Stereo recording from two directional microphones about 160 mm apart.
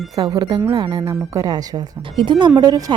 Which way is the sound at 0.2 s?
30° right (ahead or behind).